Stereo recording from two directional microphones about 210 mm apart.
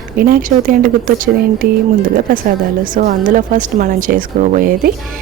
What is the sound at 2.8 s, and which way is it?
Speech, 40° right (ahead or behind).